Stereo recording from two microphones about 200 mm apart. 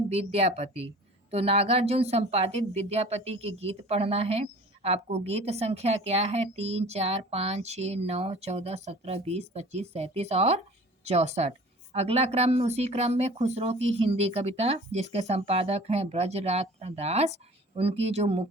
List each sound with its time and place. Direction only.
0.1 s speech: 30° right (ahead or behind)